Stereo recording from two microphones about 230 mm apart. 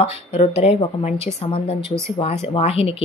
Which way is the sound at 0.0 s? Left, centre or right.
Left.